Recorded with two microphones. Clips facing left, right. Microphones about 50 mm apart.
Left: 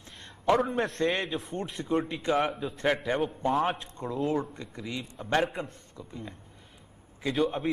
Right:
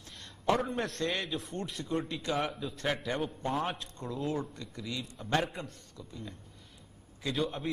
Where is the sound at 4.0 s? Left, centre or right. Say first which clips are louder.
Left 5 dB; left.